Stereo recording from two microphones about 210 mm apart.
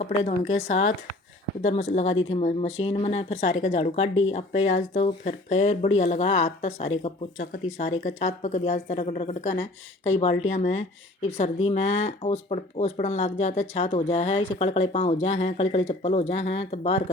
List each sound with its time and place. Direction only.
0.0 s a woman's voice: 35° left (ahead or behind)